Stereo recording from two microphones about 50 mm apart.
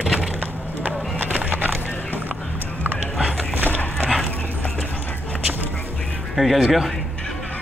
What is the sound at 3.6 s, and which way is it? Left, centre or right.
Dog, left.